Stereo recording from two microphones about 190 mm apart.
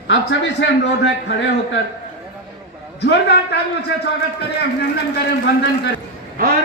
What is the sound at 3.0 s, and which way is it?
Speech, 60° left (ahead or behind).